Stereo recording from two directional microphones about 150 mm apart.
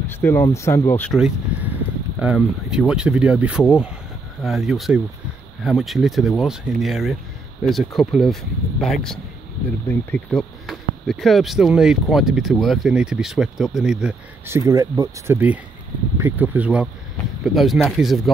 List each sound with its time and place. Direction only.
0.1 s speech: 15° left (ahead or behind)
1.1 s speech: 5° right (ahead or behind)
14.0 s speech: 15° right (ahead or behind)
17.6 s speech: 5° left (ahead or behind)